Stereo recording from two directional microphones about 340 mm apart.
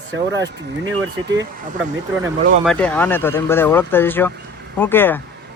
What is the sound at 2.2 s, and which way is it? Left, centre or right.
Speech, centre.